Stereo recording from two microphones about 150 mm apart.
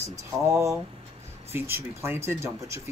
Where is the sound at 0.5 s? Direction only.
20° right (ahead or behind).